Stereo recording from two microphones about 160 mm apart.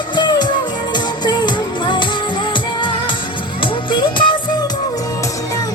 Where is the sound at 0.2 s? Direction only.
25° left (ahead or behind).